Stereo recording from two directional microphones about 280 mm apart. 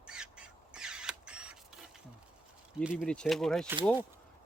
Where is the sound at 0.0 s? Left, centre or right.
Centre.